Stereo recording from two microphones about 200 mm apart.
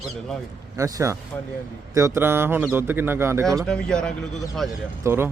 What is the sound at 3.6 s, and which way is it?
Speech, 5° left (ahead or behind).